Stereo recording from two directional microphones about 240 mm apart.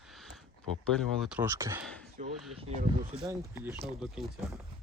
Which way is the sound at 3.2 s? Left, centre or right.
Centre.